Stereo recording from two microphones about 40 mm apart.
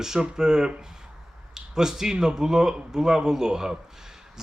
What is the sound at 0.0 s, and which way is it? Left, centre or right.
Speech, centre.